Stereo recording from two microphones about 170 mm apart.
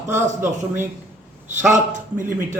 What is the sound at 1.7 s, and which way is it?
Speech, 45° right (ahead or behind).